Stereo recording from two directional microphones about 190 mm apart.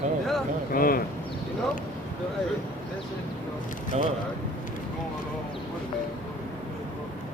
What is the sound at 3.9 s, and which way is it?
Speech, 35° right (ahead or behind).